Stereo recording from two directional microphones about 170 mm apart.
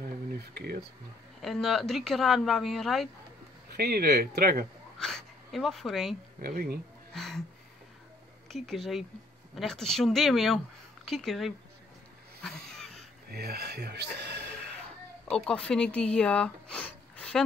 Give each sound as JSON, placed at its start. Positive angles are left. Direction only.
{"t": 0.6, "sound": "speech", "side_deg": -65}
{"t": 1.4, "sound": "speech", "side_deg": 0}
{"t": 3.7, "sound": "speech", "side_deg": -65}
{"t": 4.9, "sound": "speech", "side_deg": 5}
{"t": 6.4, "sound": "speech", "side_deg": -60}
{"t": 7.1, "sound": "music", "side_deg": 0}
{"t": 8.5, "sound": "speech", "side_deg": 0}
{"t": 12.4, "sound": "a sound", "side_deg": 5}
{"t": 13.3, "sound": "speech", "side_deg": -65}
{"t": 15.2, "sound": "speech", "side_deg": 5}